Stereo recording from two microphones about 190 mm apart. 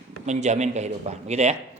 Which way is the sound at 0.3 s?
35° right (ahead or behind).